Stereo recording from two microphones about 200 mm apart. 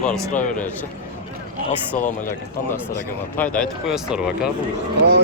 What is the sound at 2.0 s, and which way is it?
Speech, 40° left (ahead or behind).